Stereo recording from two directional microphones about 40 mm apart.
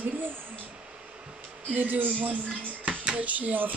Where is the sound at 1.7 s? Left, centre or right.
Right.